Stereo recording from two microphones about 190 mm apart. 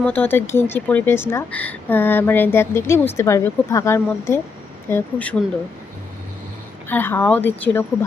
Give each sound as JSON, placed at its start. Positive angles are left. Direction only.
{"t": 0.0, "sound": "a woman's voice", "side_deg": 10}
{"t": 6.8, "sound": "a woman's voice", "side_deg": 10}